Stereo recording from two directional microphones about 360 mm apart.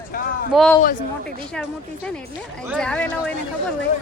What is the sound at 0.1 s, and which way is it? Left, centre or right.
Speech, left.